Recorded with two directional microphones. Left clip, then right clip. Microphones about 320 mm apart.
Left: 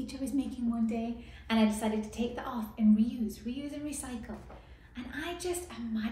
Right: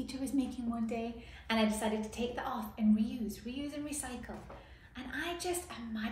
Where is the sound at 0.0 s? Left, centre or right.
Centre.